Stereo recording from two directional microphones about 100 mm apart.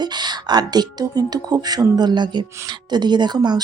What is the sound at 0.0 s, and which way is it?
Speech, 45° right (ahead or behind).